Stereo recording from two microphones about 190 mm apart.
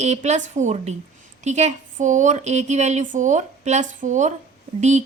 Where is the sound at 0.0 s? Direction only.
35° right (ahead or behind).